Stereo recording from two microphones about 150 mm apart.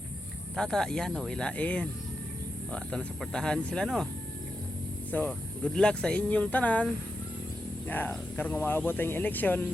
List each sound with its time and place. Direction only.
0.5 s speech: 5° left (ahead or behind)
5.1 s speech: 10° left (ahead or behind)